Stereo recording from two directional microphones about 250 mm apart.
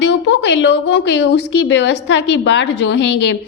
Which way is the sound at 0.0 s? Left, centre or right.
Left.